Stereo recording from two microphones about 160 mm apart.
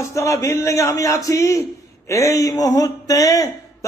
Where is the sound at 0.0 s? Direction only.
20° left (ahead or behind).